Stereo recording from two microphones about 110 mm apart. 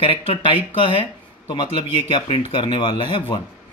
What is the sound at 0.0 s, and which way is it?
Speech, 50° left (ahead or behind).